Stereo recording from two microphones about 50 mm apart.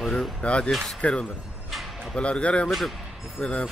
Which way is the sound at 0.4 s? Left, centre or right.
Left.